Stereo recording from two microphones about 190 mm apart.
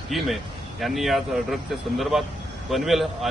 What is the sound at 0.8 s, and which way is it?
Speech, centre (ahead or behind).